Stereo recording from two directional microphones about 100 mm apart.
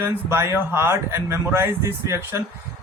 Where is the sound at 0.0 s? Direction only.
25° right (ahead or behind).